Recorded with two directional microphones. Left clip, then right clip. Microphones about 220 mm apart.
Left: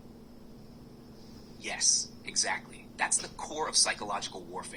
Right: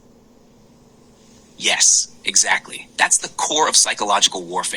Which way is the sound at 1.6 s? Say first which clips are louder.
Right 14 dB; 40° right (ahead or behind).